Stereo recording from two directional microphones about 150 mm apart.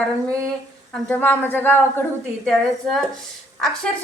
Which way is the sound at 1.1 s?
10° left (ahead or behind).